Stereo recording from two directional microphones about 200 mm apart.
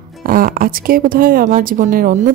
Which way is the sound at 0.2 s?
45° right (ahead or behind).